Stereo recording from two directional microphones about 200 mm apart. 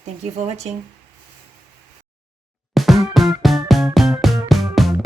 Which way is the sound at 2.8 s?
Centre (ahead or behind).